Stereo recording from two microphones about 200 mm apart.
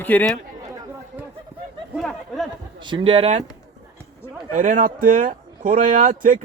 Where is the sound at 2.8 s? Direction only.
25° right (ahead or behind).